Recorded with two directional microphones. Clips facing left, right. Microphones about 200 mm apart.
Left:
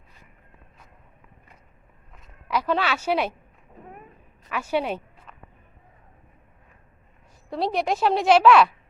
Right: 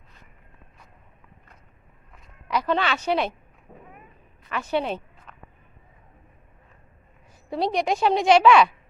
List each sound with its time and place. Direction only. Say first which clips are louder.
2.1 s speech: even; centre (ahead or behind)
3.7 s cat: right 1 dB; 50° right (ahead or behind)
4.4 s speech: even; 10° left (ahead or behind)
7.5 s a woman's voice: right 1 dB; 5° left (ahead or behind)